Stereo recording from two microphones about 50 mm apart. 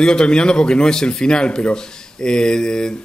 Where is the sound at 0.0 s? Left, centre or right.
Centre.